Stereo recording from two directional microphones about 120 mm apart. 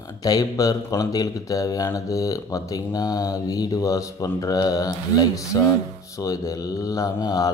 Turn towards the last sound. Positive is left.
turn(degrees=30)  # may be behind; listen again after turning